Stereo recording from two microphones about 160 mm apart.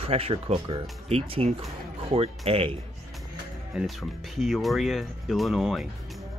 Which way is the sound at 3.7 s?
Centre (ahead or behind).